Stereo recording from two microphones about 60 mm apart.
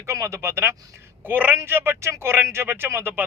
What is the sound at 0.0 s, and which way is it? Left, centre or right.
Speech, right.